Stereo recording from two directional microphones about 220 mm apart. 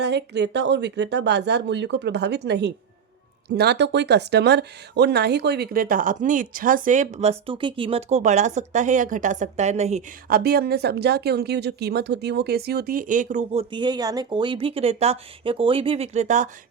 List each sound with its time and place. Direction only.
0.0 s speech: 50° right (ahead or behind); by 16.5 s 35° right (ahead or behind)